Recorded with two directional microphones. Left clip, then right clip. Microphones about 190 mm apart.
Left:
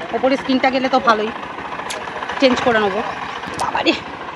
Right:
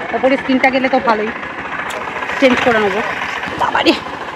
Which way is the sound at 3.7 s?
20° right (ahead or behind).